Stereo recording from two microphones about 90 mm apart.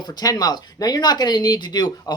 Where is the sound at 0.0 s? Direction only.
45° left (ahead or behind).